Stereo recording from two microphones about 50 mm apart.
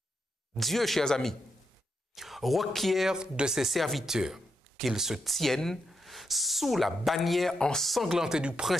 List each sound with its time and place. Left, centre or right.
0.6 s speech: centre
2.1 s speech: centre
3.1 s speech: centre
3.5 s speech: centre
5.3 s speech: centre
7.5 s speech: centre
7.8 s speech: centre
8.2 s speech: centre